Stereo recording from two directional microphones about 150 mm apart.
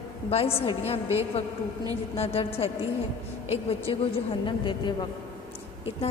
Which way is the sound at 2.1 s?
40° left (ahead or behind).